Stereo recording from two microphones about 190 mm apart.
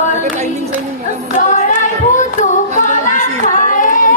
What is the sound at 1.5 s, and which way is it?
Music, 40° left (ahead or behind).